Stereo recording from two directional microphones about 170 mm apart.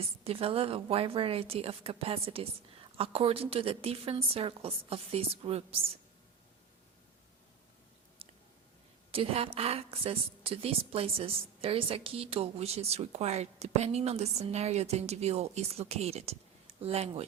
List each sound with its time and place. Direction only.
0.3 s a woman's voice: 35° right (ahead or behind)
8.2 s chewing: 35° right (ahead or behind)
9.1 s a woman's voice: 35° right (ahead or behind)